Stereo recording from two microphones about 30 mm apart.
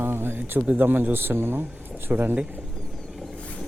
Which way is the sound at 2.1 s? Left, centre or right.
Right.